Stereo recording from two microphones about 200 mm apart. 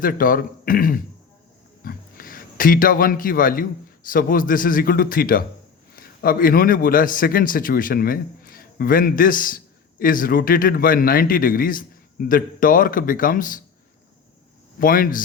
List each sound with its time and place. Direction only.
0.0 s a man's voice: 45° left (ahead or behind)
14.8 s a man's voice: 45° left (ahead or behind)